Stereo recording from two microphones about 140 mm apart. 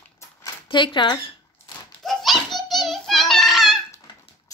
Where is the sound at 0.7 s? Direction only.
35° left (ahead or behind).